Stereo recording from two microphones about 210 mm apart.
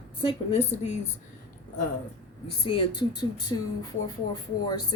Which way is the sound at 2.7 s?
25° left (ahead or behind).